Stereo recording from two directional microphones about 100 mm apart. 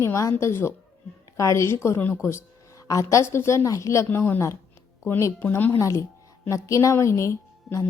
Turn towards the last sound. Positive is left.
turn(degrees=30)  # may be behind; listen again after turning